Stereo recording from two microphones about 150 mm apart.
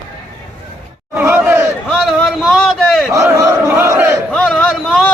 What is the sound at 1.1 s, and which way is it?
Crowd, 15° right (ahead or behind).